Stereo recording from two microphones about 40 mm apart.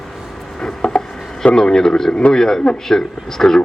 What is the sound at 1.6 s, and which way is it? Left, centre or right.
Speech, centre.